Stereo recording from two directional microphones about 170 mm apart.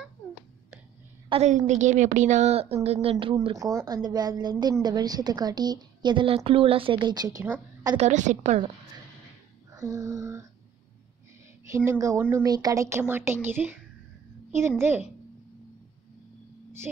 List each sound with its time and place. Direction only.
1.3 s a woman's voice: 40° right (ahead or behind)
3.5 s a woman's voice: 20° right (ahead or behind)
8.0 s a woman's voice: 45° right (ahead or behind)
9.8 s a woman's voice: 20° right (ahead or behind)
11.7 s speech: 15° right (ahead or behind)
14.8 s speech: 15° right (ahead or behind)
16.9 s speech: 5° right (ahead or behind)